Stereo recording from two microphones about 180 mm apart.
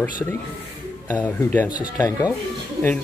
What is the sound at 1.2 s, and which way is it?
Speech, 10° left (ahead or behind).